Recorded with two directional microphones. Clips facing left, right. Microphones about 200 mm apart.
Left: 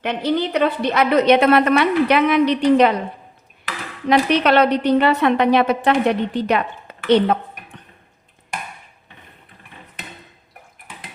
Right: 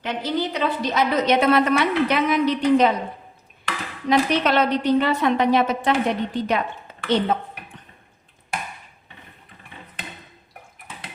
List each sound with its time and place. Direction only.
0.0 s a woman's voice: 65° left (ahead or behind)
4.1 s a woman's voice: 65° left (ahead or behind)